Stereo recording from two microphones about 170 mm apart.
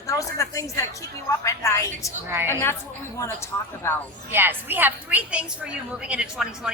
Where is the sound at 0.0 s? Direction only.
20° left (ahead or behind).